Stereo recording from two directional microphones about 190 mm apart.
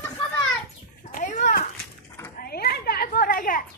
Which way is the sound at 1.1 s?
45° left (ahead or behind).